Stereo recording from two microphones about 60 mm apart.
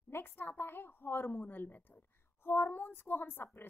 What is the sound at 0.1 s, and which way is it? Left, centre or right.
A woman's voice, left.